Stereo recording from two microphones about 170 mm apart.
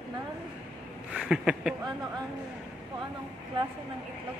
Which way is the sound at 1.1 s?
5° right (ahead or behind).